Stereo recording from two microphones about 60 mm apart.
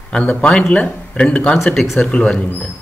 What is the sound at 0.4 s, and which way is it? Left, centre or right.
Speech, centre.